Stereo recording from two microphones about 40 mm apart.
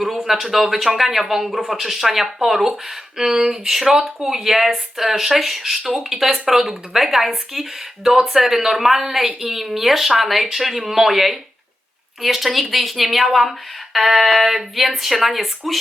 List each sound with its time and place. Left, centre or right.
0.5 s speech: centre